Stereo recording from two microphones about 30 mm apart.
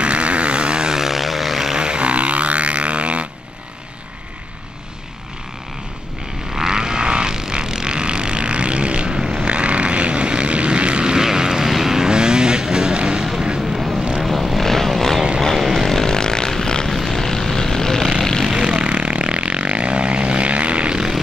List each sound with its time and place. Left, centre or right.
0.0 s vehicle: right
0.9 s vehicle: centre
1.8 s vehicle: right
2.0 s a sound: right
6.5 s vehicle: centre
11.6 s vehicle: centre; by 13.2 s right
13.2 s vehicle: centre
14.6 s vehicle: centre
15.5 s chainsaw: centre
15.9 s vehicle: centre
17.0 s vehicle: centre
18.4 s vehicle: right
18.7 s vehicle: right